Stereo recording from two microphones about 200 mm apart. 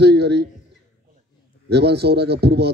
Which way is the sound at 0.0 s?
55° right (ahead or behind).